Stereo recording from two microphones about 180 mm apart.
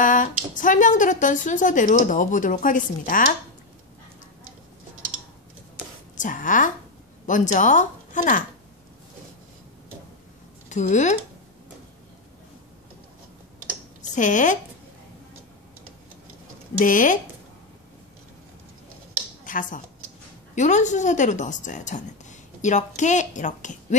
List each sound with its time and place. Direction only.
0.0 s a sound: 45° left (ahead or behind)
0.6 s speech: 45° left (ahead or behind)
6.1 s a woman's voice: 45° left (ahead or behind)
10.7 s speech: 40° left (ahead or behind)
14.1 s speech: 45° left (ahead or behind)
16.7 s speech: 45° left (ahead or behind)
19.5 s a sound: 45° left (ahead or behind)
20.5 s speech: 40° left (ahead or behind)